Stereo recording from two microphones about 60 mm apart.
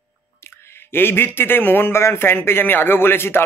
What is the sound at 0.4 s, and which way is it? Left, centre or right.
Speech, left.